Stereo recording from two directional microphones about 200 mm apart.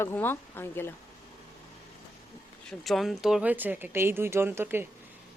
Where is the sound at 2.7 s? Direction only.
Centre (ahead or behind).